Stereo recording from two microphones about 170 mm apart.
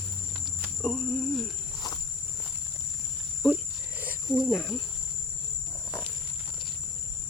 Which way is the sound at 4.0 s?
10° right (ahead or behind).